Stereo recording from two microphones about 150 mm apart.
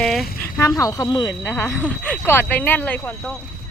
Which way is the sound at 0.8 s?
20° left (ahead or behind).